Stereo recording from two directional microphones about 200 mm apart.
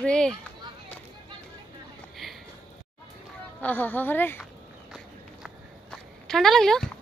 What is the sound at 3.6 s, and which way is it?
Speech, 10° left (ahead or behind).